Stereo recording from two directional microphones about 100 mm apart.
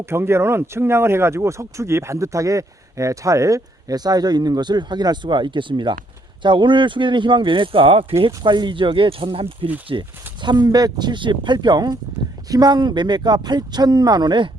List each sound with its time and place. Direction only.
0.0 s speech: 25° right (ahead or behind); by 8.0 s 65° right (ahead or behind)
8.2 s speech: 50° right (ahead or behind)
9.9 s speech: 50° right (ahead or behind)